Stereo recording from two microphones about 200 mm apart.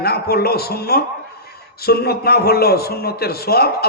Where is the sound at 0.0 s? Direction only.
50° left (ahead or behind).